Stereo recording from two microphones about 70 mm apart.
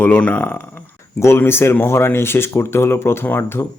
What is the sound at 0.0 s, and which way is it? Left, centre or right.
Speech, left.